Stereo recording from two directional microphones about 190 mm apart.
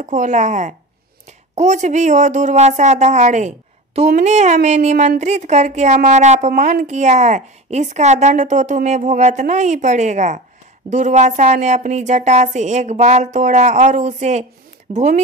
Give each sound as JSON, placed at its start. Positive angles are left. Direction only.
{"t": 0.0, "sound": "a woman's voice", "side_deg": -40}